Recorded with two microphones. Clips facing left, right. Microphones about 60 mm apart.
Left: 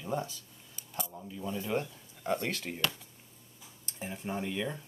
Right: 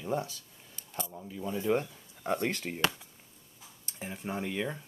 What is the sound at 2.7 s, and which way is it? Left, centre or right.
Coin, centre.